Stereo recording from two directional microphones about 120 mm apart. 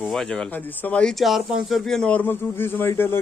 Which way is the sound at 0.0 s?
5° left (ahead or behind).